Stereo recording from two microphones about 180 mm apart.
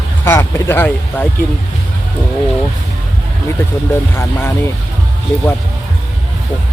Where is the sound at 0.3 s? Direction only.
15° left (ahead or behind).